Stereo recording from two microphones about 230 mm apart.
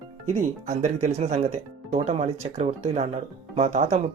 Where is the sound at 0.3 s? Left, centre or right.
Right.